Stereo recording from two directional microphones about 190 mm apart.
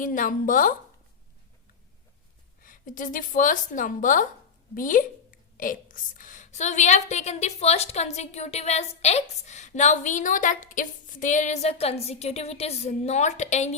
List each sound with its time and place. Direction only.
0.0 s a woman's voice: 45° left (ahead or behind)
2.6 s a woman's voice: 45° left (ahead or behind)